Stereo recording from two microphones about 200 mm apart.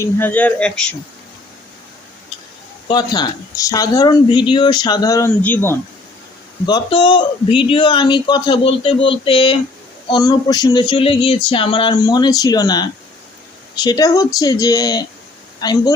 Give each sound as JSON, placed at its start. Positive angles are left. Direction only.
{"t": 0.0, "sound": "speech", "side_deg": 10}
{"t": 2.9, "sound": "a man's voice", "side_deg": 20}
{"t": 6.7, "sound": "a man's voice", "side_deg": 20}